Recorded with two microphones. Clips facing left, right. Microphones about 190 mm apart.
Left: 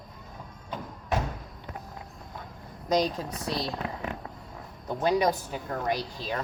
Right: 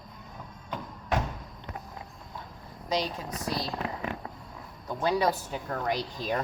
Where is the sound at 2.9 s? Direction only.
45° left (ahead or behind).